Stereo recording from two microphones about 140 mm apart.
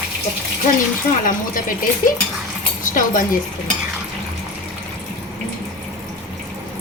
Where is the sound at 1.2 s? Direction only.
80° left.